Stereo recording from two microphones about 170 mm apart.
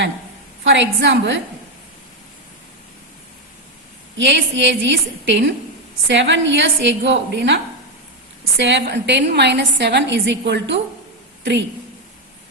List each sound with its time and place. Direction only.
0.6 s a woman's voice: 90° right
4.2 s a woman's voice: 90° right